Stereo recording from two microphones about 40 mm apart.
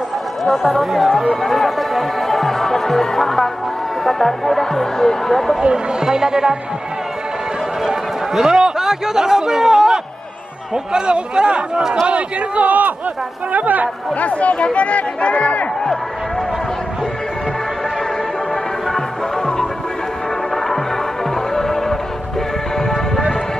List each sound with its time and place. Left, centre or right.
0.5 s speech: centre
5.6 s a man's voice: right
8.4 s a man's voice: centre
12.1 s speech: right
14.2 s speech: left
18.9 s music: centre
21.5 s music: centre